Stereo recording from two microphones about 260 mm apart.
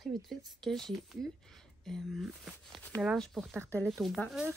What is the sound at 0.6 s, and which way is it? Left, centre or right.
Speech, centre.